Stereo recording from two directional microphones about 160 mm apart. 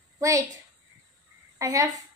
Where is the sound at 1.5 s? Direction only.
20° right (ahead or behind).